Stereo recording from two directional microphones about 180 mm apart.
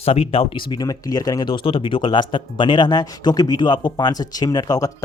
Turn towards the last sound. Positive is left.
turn(degrees=20)  # may be behind; listen again after turning